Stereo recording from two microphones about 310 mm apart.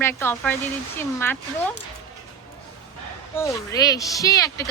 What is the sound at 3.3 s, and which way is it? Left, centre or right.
A woman's voice, centre.